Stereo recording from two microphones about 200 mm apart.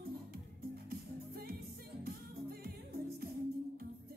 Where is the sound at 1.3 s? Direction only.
50° right (ahead or behind).